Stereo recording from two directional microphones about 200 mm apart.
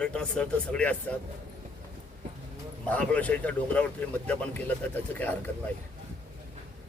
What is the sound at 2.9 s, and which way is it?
Speech, 5° left (ahead or behind).